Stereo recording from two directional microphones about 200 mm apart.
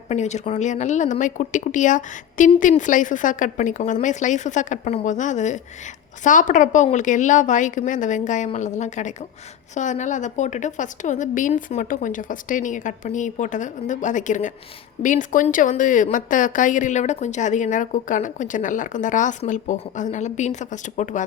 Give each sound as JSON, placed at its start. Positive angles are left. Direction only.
{"t": 0.1, "sound": "speech", "side_deg": 35}